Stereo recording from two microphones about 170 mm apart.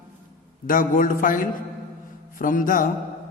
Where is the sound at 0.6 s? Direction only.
55° left (ahead or behind).